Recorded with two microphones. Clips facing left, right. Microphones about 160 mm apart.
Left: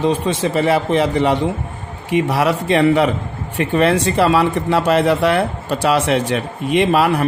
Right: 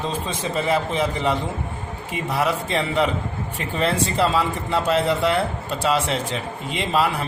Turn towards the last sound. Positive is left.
turn(degrees=65)  # may be behind; listen again after turning